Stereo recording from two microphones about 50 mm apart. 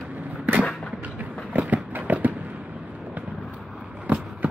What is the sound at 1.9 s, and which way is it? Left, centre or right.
Fireworks, right.